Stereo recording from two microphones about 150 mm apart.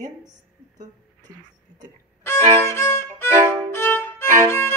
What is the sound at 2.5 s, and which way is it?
Violin, 15° left (ahead or behind).